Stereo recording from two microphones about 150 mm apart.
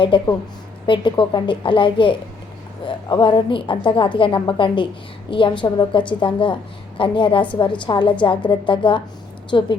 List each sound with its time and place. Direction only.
0.1 s speech: 35° left (ahead or behind)